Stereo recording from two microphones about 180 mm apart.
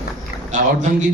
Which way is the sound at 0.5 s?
45° right (ahead or behind).